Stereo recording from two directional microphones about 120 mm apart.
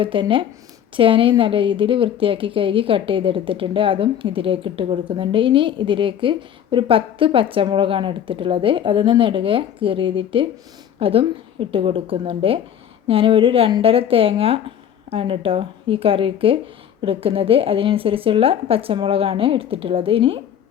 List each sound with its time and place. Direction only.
0.0 s a woman's voice: 45° right (ahead or behind)